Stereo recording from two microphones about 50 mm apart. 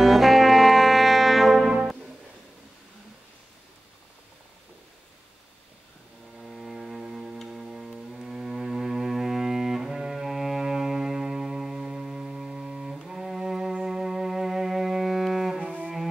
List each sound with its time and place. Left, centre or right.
0.0 s brass instrument: centre
6.4 s a sound: centre
7.5 s music: centre
15.6 s cello: right